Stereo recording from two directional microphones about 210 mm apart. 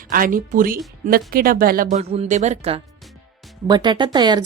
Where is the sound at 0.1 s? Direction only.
40° right (ahead or behind).